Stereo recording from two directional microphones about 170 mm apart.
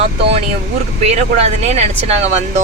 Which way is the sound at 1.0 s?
40° right (ahead or behind).